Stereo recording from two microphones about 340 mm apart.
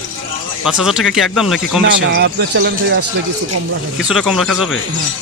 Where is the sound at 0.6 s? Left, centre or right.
Centre.